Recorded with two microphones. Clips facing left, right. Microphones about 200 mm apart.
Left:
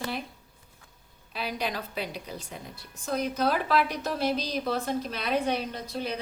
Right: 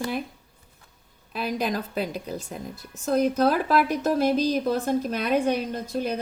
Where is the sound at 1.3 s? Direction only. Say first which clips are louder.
Right 5 dB; 45° right (ahead or behind).